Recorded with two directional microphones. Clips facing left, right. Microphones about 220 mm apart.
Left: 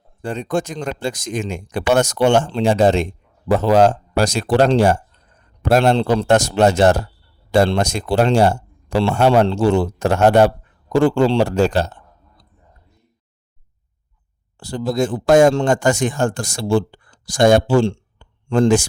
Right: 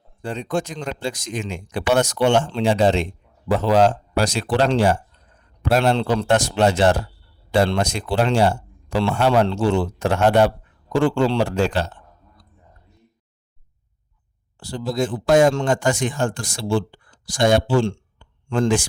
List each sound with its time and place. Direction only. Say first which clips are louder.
0.2 s speech: left 3 dB; 45° left (ahead or behind)
14.6 s speech: left 4 dB; 45° left (ahead or behind)
17.8 s a sound: left 4 dB; 35° left (ahead or behind)